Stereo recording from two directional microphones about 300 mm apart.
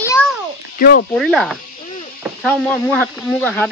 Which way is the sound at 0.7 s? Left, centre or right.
Left.